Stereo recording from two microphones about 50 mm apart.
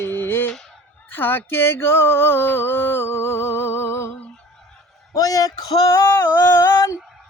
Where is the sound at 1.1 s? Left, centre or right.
Left.